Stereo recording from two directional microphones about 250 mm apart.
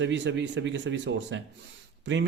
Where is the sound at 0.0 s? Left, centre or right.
Right.